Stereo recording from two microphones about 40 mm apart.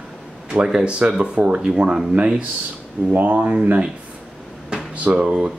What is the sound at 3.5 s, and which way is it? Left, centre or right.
Speech, right.